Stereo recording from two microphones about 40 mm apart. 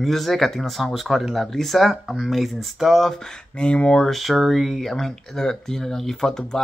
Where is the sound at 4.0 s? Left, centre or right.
Centre.